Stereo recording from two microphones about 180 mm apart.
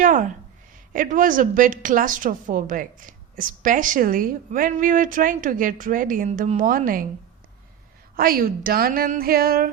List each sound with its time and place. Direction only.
0.0 s a woman's voice: 45° right (ahead or behind)
8.1 s a woman's voice: 55° right (ahead or behind)